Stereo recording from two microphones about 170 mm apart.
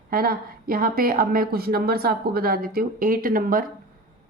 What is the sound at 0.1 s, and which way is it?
A woman's voice, 60° right (ahead or behind).